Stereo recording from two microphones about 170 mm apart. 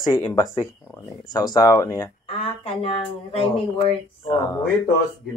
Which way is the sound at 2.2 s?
35° left (ahead or behind).